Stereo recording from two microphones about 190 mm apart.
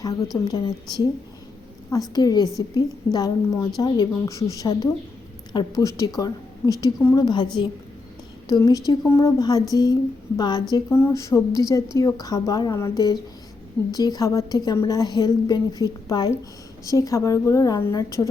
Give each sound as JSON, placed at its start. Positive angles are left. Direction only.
{"t": 0.3, "sound": "a woman's voice", "side_deg": 20}
{"t": 8.4, "sound": "a woman's voice", "side_deg": 20}